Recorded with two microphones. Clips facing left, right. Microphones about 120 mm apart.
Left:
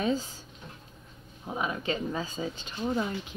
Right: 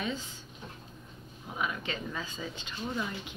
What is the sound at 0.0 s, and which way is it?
Speech, 35° left (ahead or behind).